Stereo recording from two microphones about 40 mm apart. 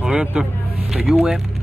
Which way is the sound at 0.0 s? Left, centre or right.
Right.